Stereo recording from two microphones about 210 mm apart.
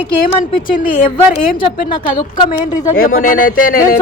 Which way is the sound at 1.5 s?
25° left (ahead or behind).